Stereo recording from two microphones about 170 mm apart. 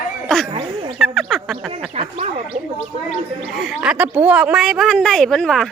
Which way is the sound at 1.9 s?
40° right (ahead or behind).